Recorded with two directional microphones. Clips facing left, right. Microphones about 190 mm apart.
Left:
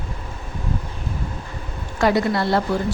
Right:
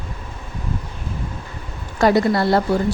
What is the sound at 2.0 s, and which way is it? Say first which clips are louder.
Speech: right 3 dB; 40° right (ahead or behind).